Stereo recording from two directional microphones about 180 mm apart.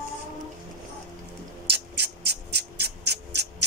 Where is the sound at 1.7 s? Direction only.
65° right (ahead or behind).